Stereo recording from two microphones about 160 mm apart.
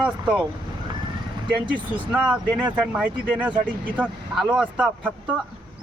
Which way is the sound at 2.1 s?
10° right (ahead or behind).